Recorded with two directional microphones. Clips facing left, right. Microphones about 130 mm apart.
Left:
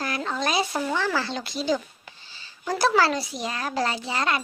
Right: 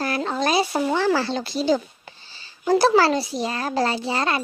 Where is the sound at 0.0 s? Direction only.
35° right (ahead or behind).